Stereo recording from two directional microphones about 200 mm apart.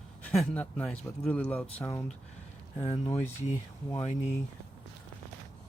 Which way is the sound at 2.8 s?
20° left (ahead or behind).